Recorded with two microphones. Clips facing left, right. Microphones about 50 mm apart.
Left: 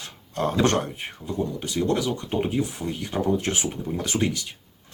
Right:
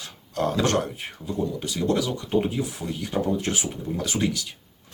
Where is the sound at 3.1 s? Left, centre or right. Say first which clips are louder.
Left 1 dB; centre.